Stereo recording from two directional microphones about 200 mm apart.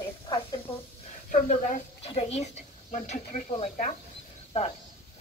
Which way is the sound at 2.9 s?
40° left (ahead or behind).